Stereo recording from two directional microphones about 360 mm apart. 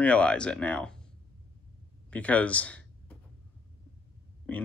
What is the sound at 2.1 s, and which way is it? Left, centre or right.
Speech, centre.